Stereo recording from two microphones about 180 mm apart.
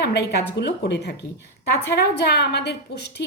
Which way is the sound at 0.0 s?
65° left (ahead or behind).